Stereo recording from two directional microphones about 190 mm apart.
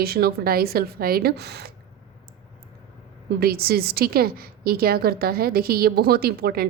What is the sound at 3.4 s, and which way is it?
A woman's voice, 55° right (ahead or behind).